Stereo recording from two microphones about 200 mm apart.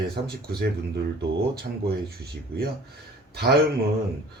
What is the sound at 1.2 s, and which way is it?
Speech, 50° right (ahead or behind).